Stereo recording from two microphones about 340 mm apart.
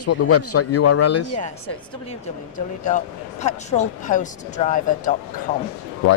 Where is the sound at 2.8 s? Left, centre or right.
Left.